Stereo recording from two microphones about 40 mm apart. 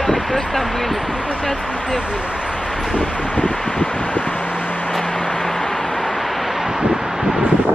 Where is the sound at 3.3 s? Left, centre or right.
Left.